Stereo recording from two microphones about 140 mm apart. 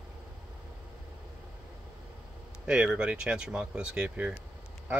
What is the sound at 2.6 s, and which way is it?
Speech, 5° right (ahead or behind).